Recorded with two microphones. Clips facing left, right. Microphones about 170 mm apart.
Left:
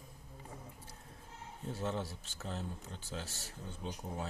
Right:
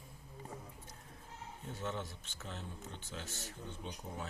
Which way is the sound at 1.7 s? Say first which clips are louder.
Left 4 dB; 35° left (ahead or behind).